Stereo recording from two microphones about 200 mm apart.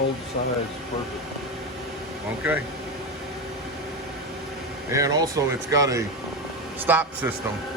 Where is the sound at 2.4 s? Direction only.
10° right (ahead or behind).